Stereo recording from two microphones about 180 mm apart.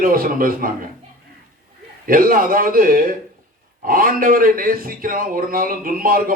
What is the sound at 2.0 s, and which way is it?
Speech, 50° right (ahead or behind).